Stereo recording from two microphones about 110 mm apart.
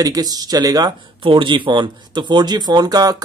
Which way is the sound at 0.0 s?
35° right (ahead or behind).